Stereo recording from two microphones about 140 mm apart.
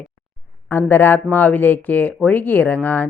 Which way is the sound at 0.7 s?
15° left (ahead or behind).